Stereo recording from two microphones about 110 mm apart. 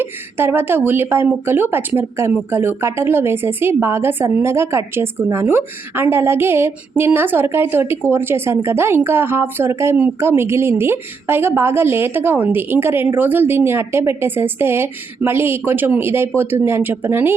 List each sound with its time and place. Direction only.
0.0 s speech: 20° right (ahead or behind)